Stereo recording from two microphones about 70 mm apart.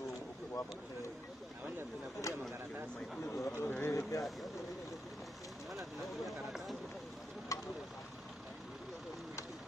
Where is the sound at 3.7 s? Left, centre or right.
Left.